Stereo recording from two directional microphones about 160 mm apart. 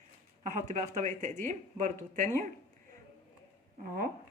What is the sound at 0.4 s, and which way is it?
Speech, 50° right (ahead or behind).